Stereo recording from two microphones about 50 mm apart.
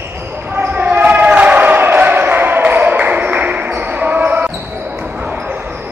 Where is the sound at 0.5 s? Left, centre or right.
Right.